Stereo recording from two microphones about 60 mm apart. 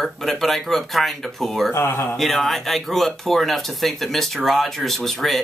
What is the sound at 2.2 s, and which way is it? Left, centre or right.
Speech, centre.